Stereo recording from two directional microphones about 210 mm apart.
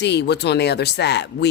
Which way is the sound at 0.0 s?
55° left (ahead or behind).